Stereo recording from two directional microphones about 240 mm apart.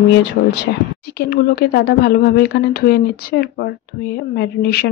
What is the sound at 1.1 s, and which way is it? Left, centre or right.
A woman's voice, left.